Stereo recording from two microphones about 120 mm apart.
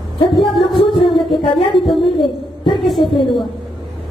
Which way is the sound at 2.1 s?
40° left (ahead or behind).